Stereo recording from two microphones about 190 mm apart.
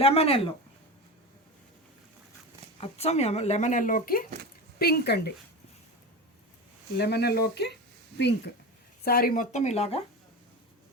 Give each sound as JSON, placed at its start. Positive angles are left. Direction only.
{"t": 0.0, "sound": "speech", "side_deg": 30}
{"t": 2.8, "sound": "speech", "side_deg": 35}
{"t": 6.9, "sound": "speech", "side_deg": 60}
{"t": 9.0, "sound": "speech", "side_deg": 50}